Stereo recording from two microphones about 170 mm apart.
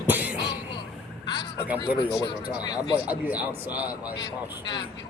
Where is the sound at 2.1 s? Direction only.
20° left (ahead or behind).